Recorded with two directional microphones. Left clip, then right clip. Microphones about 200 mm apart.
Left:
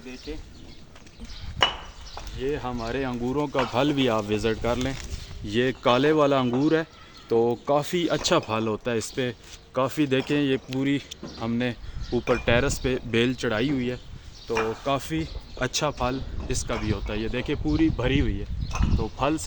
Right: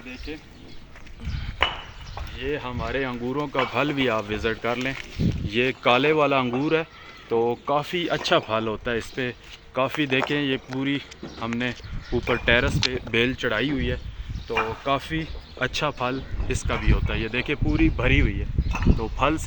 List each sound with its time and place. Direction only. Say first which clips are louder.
2.4 s speech: even; 35° left (ahead or behind); by 19.4 s 15° left (ahead or behind)